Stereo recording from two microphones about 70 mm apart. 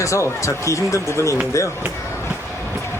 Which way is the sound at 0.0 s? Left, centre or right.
Left.